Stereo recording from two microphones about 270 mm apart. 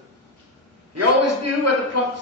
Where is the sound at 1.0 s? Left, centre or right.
Right.